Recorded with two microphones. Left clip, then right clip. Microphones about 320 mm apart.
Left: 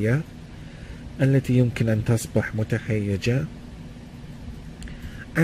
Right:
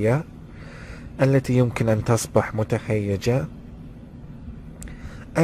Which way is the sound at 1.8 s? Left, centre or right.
Right.